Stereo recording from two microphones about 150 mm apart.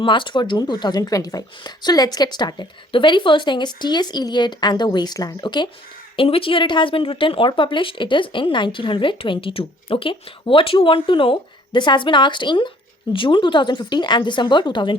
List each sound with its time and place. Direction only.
0.0 s a woman's voice: 35° left (ahead or behind)